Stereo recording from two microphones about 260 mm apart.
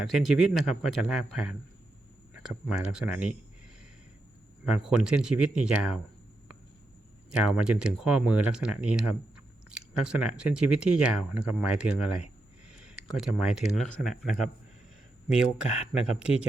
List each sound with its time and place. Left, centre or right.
0.0 s speech: centre
4.6 s speech: centre
7.3 s speech: centre
15.6 s speech: left